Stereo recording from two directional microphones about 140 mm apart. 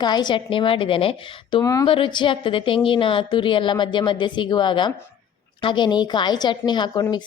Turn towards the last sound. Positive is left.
turn(degrees=30)  # may be behind; listen again after turning